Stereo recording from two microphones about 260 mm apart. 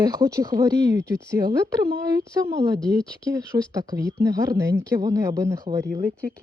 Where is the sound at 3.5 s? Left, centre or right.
Centre.